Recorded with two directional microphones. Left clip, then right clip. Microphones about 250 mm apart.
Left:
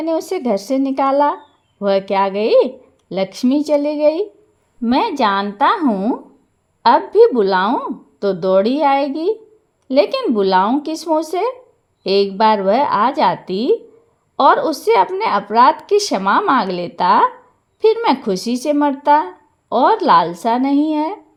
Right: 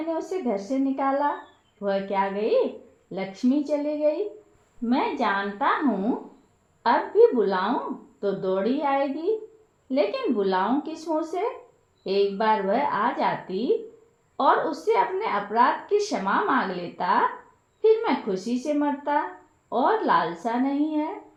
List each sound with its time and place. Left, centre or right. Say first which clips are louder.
0.1 s a woman's voice: left 9 dB; left
6.8 s a woman's voice: left 8 dB; left